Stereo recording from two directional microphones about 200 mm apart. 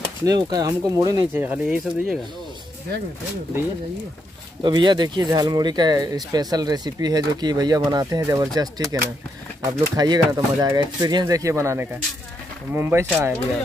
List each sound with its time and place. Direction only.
0.2 s speech: 20° right (ahead or behind)
4.6 s speech: 20° right (ahead or behind)